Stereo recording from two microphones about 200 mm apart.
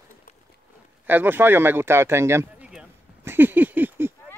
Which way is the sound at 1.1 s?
10° right (ahead or behind).